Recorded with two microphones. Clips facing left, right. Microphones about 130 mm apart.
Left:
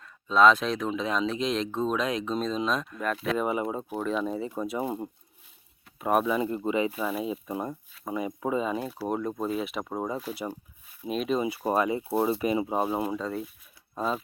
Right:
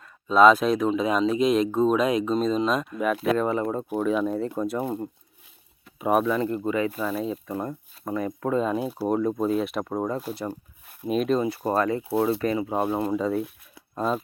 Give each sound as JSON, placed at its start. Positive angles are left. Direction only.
{"t": 0.0, "sound": "speech", "side_deg": -5}
{"t": 3.3, "sound": "speech", "side_deg": 10}
{"t": 3.8, "sound": "speech", "side_deg": 0}
{"t": 6.0, "sound": "speech", "side_deg": -5}
{"t": 6.2, "sound": "speech", "side_deg": 10}
{"t": 6.9, "sound": "speech", "side_deg": 5}
{"t": 13.1, "sound": "speech", "side_deg": -10}